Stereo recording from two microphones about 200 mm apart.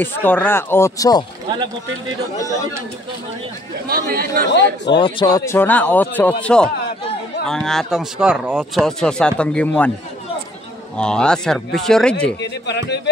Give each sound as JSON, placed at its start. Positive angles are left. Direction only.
{"t": 0.0, "sound": "a man's voice", "side_deg": 10}
{"t": 3.9, "sound": "speech", "side_deg": -50}
{"t": 4.9, "sound": "a man's voice", "side_deg": 25}
{"t": 11.0, "sound": "speech", "side_deg": 5}
{"t": 12.4, "sound": "a man's voice", "side_deg": 60}